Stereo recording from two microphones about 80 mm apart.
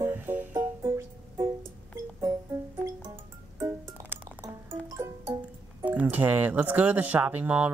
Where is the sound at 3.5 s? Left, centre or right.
Right.